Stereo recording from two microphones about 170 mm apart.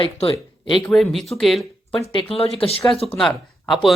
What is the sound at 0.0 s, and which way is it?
Speech, 30° left (ahead or behind).